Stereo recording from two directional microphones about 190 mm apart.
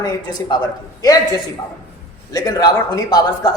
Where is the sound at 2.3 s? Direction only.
20° left (ahead or behind).